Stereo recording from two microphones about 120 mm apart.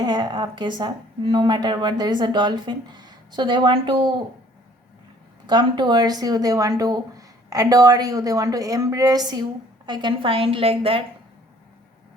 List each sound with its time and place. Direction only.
0.0 s speech: 35° right (ahead or behind)
5.5 s speech: 35° right (ahead or behind)